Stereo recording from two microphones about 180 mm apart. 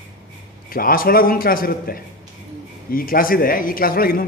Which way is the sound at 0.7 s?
55° left (ahead or behind).